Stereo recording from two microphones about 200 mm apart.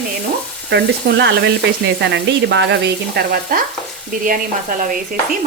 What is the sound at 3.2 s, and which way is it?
Frying, 55° right (ahead or behind).